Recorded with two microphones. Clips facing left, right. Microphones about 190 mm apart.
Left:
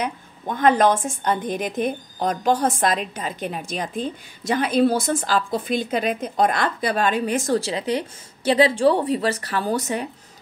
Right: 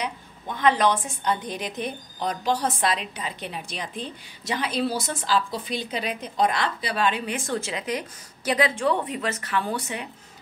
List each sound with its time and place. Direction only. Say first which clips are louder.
0.0 s a woman's voice: left 5 dB; 50° left (ahead or behind)